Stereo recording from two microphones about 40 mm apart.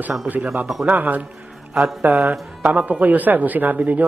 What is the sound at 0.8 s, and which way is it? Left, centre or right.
A man's voice, right.